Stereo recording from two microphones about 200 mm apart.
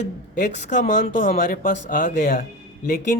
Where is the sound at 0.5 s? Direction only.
35° left (ahead or behind).